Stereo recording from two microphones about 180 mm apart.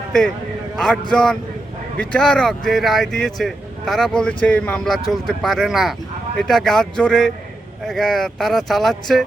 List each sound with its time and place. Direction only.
0.8 s speech: 5° left (ahead or behind)